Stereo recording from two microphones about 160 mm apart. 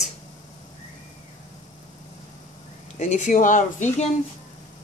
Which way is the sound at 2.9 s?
50° left (ahead or behind).